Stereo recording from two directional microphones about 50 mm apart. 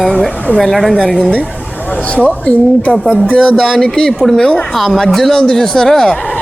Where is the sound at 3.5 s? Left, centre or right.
Centre.